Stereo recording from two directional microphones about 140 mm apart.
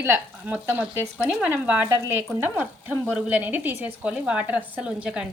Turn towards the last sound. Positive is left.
turn(degrees=-5)  # may be behind; listen again after turning